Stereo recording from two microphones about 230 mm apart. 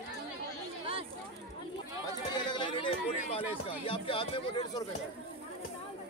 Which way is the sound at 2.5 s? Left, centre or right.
Left.